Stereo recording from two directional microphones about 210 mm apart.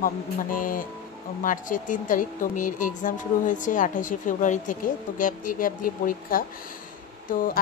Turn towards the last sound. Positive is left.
turn(degrees=40)  # may be behind; listen again after turning